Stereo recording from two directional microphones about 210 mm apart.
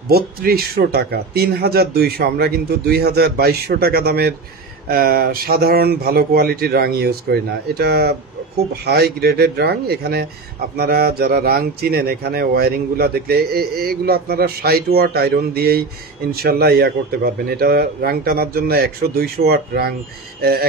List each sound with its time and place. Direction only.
0.1 s speech: 45° right (ahead or behind)